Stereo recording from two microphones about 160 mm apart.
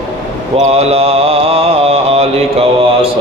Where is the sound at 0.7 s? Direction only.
40° right (ahead or behind).